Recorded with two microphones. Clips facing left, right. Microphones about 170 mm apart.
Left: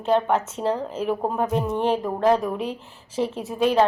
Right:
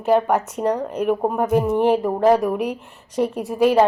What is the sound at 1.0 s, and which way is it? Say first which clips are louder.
A woman's voice: right 4 dB; 10° right (ahead or behind).